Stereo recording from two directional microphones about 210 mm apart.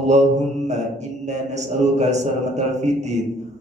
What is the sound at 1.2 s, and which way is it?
A man's voice, 35° right (ahead or behind).